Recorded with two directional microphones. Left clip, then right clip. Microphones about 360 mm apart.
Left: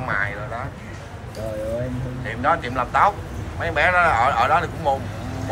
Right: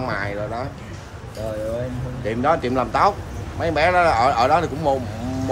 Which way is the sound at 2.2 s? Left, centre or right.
Centre.